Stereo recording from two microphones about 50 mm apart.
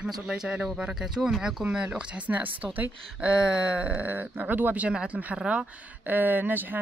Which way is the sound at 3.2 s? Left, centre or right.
Centre.